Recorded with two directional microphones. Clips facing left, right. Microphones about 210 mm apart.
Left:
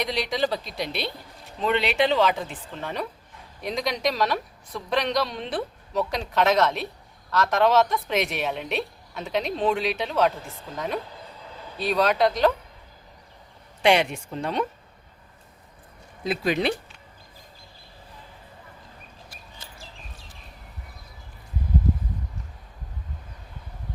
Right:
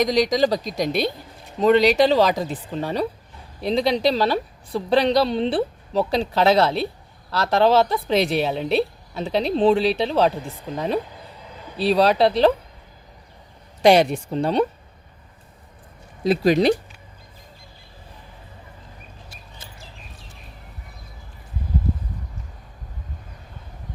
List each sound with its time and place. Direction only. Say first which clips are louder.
0.0 s a woman's voice: right 8 dB; 40° right (ahead or behind)
13.8 s a woman's voice: right 6 dB; 35° right (ahead or behind)
16.2 s a woman's voice: right 7 dB; 40° right (ahead or behind)